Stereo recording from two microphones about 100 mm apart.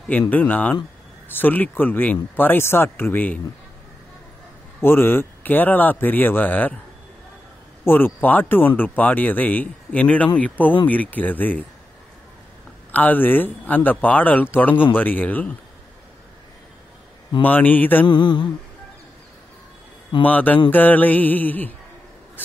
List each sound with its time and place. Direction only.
0.3 s speech: 15° left (ahead or behind)
4.8 s speech: 20° left (ahead or behind)
7.8 s speech: 20° left (ahead or behind)
12.9 s speech: 20° left (ahead or behind)
17.4 s speech: 15° left (ahead or behind)
18.0 s mantra: 50° left (ahead or behind)
20.2 s speech: 15° left (ahead or behind)